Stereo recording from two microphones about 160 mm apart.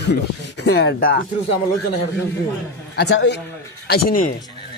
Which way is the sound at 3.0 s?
90° left.